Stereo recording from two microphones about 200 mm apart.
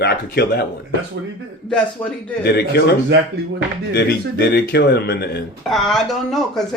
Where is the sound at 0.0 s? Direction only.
50° left (ahead or behind).